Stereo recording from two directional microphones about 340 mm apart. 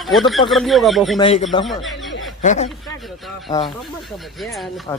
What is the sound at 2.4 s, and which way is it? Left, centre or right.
Speech, centre.